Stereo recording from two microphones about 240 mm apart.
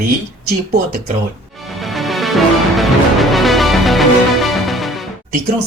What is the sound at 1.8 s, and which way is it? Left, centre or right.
Music, centre.